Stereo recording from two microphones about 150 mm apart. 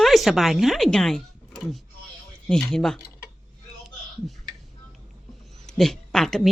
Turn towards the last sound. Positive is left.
turn(degrees=0)  # may be behind; listen again after turning